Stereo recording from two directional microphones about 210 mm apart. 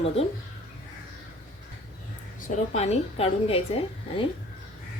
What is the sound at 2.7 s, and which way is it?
A woman's voice, 30° left (ahead or behind).